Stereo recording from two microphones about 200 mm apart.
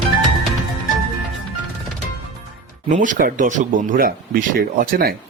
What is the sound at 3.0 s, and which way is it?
Speech, 45° right (ahead or behind).